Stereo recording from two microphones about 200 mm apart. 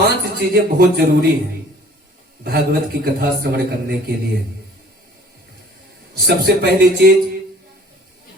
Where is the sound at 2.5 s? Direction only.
50° right (ahead or behind).